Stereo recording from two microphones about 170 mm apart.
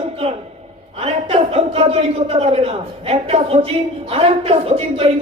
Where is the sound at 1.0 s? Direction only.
35° right (ahead or behind).